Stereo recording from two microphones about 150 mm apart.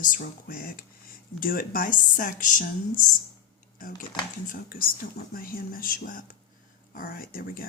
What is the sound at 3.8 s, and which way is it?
Speech, 65° left (ahead or behind).